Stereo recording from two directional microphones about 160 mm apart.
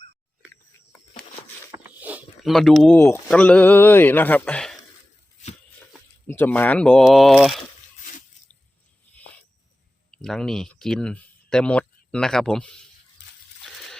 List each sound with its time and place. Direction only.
2.0 s a sound: 10° right (ahead or behind)
2.4 s speech: centre (ahead or behind)
6.2 s speech: 10° left (ahead or behind)
10.1 s speech: 5° left (ahead or behind)